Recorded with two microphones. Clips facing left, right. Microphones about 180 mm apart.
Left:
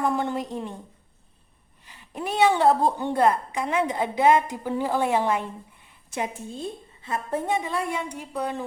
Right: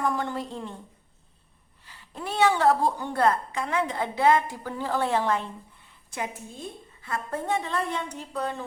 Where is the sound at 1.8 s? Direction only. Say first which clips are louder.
Left 4 dB; 20° left (ahead or behind).